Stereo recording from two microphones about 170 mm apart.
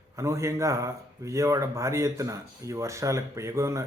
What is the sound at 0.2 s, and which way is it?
Speech, 15° right (ahead or behind).